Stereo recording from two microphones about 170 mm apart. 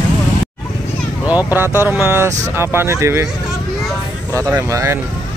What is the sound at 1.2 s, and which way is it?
Speech, 10° right (ahead or behind).